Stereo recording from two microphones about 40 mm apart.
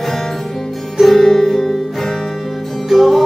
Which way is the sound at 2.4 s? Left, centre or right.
Centre.